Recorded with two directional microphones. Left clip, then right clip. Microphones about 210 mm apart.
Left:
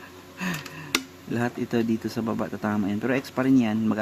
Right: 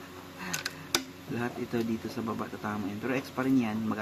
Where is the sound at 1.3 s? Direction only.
50° left (ahead or behind).